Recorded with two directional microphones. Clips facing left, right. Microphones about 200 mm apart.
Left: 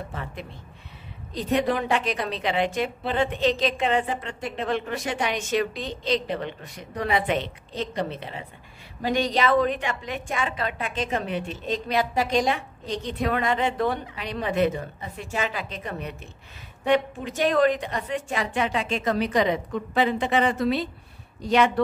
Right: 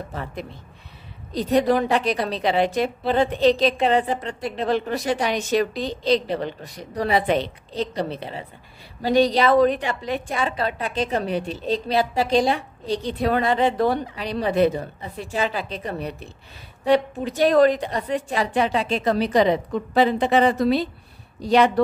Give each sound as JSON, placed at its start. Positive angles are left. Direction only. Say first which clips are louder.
{"t": 1.3, "sound": "a woman's voice", "louder": "right 5 dB", "side_deg": -40}